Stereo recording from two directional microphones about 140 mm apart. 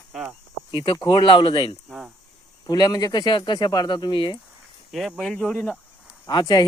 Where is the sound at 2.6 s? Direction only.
25° left (ahead or behind).